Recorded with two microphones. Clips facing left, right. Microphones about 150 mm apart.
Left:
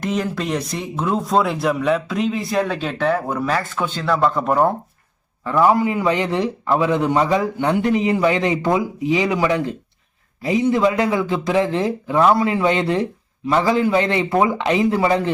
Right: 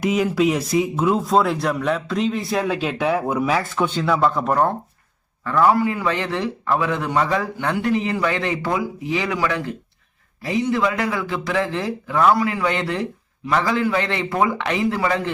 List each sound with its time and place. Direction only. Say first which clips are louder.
0.0 s a man's voice: right 4 dB; 5° right (ahead or behind)
5.5 s a man's voice: left 1 dB; 15° left (ahead or behind)